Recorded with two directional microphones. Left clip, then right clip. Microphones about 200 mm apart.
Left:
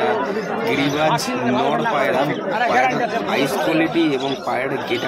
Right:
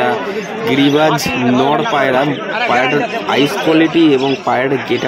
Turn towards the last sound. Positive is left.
turn(degrees=-25)  # may be behind; listen again after turning